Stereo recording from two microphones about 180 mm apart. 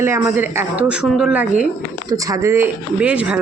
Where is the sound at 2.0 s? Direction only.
20° right (ahead or behind).